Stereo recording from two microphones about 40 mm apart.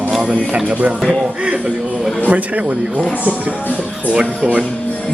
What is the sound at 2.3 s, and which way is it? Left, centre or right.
Speech, right.